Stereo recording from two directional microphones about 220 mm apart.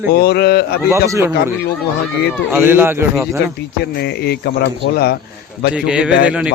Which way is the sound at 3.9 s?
50° left (ahead or behind).